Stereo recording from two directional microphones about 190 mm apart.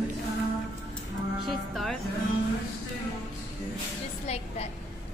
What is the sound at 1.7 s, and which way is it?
Music, centre (ahead or behind).